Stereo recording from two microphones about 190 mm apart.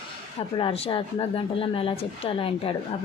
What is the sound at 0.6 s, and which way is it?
A woman's voice, 30° left (ahead or behind).